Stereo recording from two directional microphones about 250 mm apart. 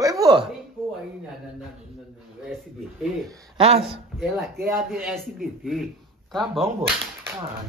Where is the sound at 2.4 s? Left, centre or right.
Centre.